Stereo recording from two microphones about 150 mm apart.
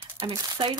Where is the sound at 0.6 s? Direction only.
35° right (ahead or behind).